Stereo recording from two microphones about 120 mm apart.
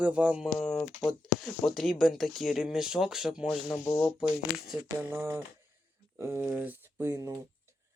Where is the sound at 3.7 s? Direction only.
25° left (ahead or behind).